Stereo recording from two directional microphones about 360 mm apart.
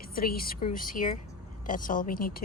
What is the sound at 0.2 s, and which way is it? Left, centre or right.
Speech, left.